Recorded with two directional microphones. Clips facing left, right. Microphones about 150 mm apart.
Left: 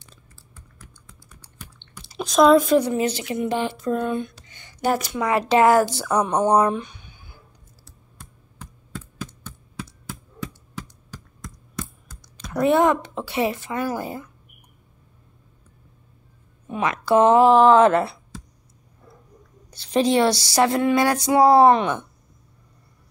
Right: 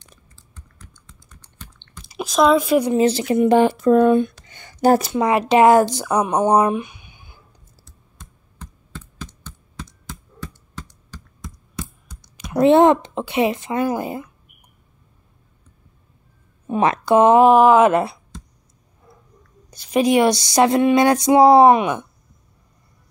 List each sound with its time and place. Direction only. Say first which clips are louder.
0.4 s typing: right 2 dB; 10° left (ahead or behind)
2.0 s speech: left 1 dB; 5° right (ahead or behind)
2.9 s speech: right 6 dB; 30° right (ahead or behind)
3.3 s speech: right 13 dB; 50° right (ahead or behind)
5.1 s speech: right 3 dB; 20° right (ahead or behind)
7.8 s computer keyboard: even; 10° left (ahead or behind)
11.4 s a sound: right 1 dB; centre (ahead or behind)
12.4 s a sound: right 5 dB; 25° right (ahead or behind)
16.6 s speech: right 6 dB; 35° right (ahead or behind)
17.0 s speech: right 2 dB; 20° right (ahead or behind)
19.7 s a sound: right 3 dB; 10° right (ahead or behind)